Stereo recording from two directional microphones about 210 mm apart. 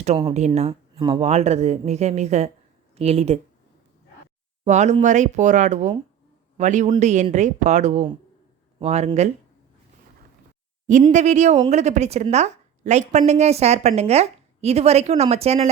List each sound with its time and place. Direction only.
0.3 s a woman's voice: 30° right (ahead or behind)
4.6 s a woman's voice: 35° right (ahead or behind)
11.1 s a woman's voice: 35° right (ahead or behind)